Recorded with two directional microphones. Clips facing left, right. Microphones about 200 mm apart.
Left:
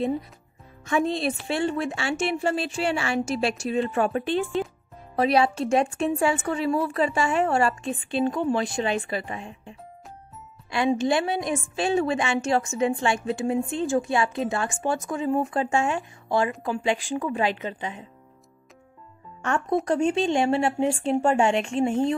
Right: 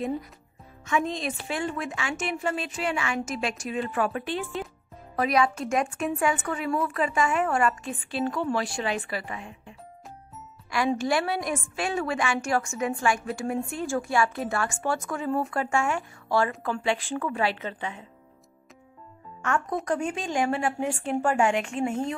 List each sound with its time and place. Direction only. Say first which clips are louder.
0.8 s a woman's voice: left 4 dB; 35° left (ahead or behind); by 18.0 s 15° left (ahead or behind)
19.4 s a woman's voice: left 3 dB; 35° left (ahead or behind)